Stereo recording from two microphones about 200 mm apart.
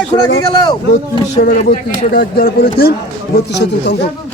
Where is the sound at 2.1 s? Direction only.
45° left (ahead or behind).